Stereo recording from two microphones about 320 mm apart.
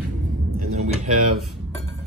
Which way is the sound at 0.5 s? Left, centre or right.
Right.